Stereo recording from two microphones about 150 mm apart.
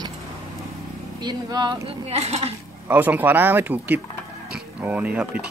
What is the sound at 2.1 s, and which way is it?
Speech, 45° right (ahead or behind).